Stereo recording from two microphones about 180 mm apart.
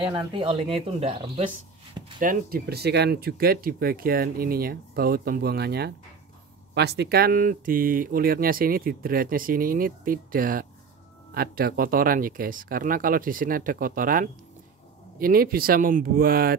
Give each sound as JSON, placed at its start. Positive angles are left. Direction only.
{"t": 0.1, "sound": "speech", "side_deg": -30}
{"t": 2.1, "sound": "speech", "side_deg": -55}